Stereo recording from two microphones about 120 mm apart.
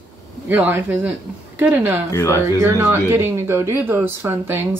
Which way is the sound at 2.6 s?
20° right (ahead or behind).